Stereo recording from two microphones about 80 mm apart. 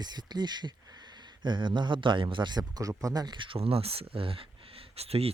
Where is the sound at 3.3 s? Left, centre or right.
Right.